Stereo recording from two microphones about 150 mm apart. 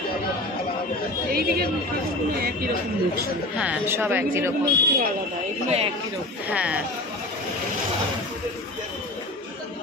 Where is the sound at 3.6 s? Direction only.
10° right (ahead or behind).